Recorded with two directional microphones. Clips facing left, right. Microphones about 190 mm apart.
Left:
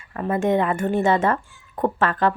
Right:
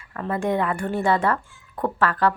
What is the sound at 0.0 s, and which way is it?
A woman's voice, 25° left (ahead or behind).